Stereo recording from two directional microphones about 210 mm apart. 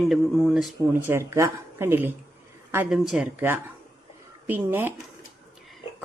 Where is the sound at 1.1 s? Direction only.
15° right (ahead or behind).